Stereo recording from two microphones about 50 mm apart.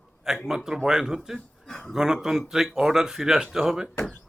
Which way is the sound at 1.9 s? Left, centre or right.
Centre.